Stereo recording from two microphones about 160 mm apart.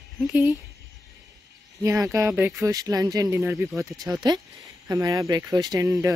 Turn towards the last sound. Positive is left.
turn(degrees=-20)  # may be behind; listen again after turning